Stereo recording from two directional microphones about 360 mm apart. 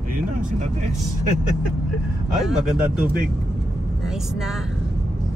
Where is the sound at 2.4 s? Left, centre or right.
Centre.